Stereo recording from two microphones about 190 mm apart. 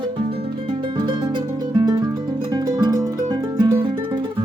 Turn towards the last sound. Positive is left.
turn(degrees=-25)  # may be behind; listen again after turning